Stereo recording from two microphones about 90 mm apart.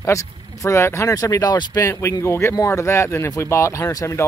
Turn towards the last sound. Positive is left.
turn(degrees=40)  # may be behind; listen again after turning